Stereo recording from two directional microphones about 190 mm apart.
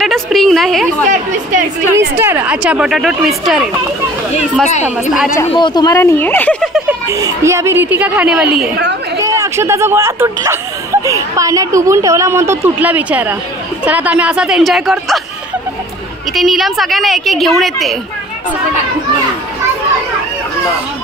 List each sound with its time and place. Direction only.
0.0 s a sound: centre (ahead or behind)
1.0 s a woman's voice: 40° right (ahead or behind)
2.0 s speech: 10° right (ahead or behind)
5.6 s speech: 25° left (ahead or behind); by 7.0 s centre (ahead or behind)
7.1 s speech: 15° right (ahead or behind)
9.2 s speech: 15° right (ahead or behind)
16.3 s speech: centre (ahead or behind)